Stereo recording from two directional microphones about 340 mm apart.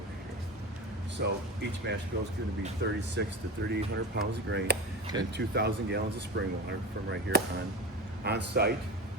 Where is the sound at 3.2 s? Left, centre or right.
Right.